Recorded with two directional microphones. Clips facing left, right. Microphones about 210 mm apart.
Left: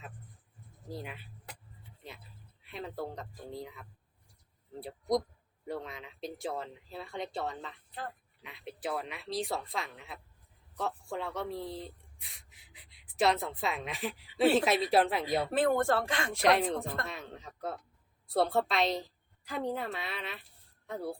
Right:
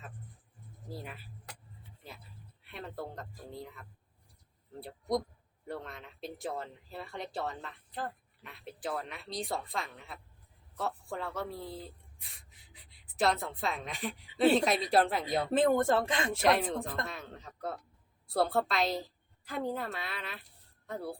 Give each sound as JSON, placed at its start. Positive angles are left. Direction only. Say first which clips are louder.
{"t": 0.9, "sound": "speech", "louder": "left 2 dB", "side_deg": 0}
{"t": 2.6, "sound": "a woman's voice", "louder": "left 3 dB", "side_deg": 0}
{"t": 4.8, "sound": "a woman's voice", "louder": "left 2 dB", "side_deg": 0}
{"t": 15.5, "sound": "speech", "louder": "right 2 dB", "side_deg": -20}
{"t": 16.3, "sound": "a woman's voice", "louder": "left 2 dB", "side_deg": 0}